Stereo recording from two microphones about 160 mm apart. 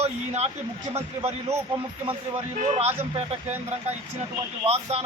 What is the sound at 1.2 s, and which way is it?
Speech, 20° right (ahead or behind).